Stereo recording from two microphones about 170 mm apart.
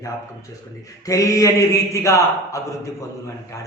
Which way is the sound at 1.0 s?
20° left (ahead or behind).